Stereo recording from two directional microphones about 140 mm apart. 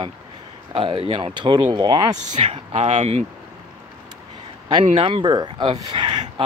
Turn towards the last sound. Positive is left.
turn(degrees=-30)  # may be behind; listen again after turning